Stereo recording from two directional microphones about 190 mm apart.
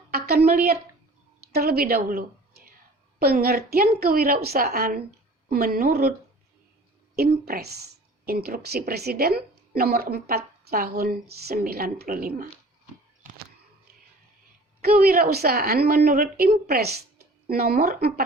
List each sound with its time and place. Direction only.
0.1 s a woman's voice: 55° right (ahead or behind)
7.2 s a woman's voice: 55° right (ahead or behind)
14.8 s a woman's voice: 55° right (ahead or behind)